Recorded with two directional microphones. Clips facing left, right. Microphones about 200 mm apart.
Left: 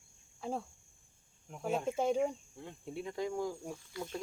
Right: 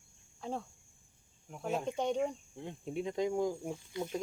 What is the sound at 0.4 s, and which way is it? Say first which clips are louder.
Cricket: left 1 dB; 5° left (ahead or behind).